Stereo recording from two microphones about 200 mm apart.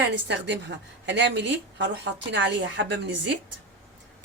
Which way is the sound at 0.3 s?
60° right (ahead or behind).